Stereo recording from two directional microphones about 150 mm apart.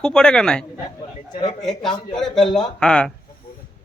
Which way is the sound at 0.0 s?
5° left (ahead or behind).